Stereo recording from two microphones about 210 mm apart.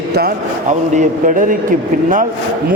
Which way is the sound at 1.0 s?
40° right (ahead or behind).